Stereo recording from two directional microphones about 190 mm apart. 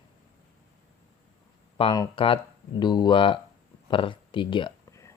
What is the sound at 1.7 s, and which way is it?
Speech, 30° left (ahead or behind).